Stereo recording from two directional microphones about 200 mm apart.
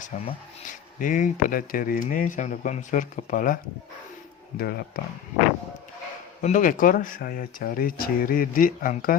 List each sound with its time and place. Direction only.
0.1 s speech: 40° left (ahead or behind)
6.4 s speech: 40° left (ahead or behind)